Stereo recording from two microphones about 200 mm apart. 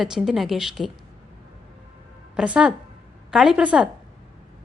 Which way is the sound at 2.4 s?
5° right (ahead or behind).